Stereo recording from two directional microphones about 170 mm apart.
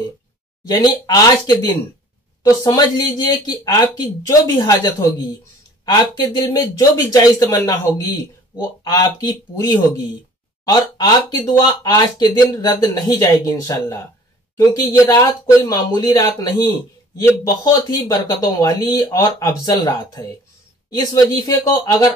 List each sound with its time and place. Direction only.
0.7 s speech: 25° left (ahead or behind)